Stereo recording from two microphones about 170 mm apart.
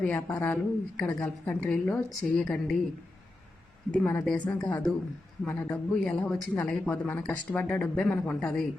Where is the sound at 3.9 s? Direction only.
5° left (ahead or behind).